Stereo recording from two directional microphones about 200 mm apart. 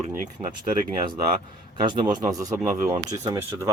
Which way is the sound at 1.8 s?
20° right (ahead or behind).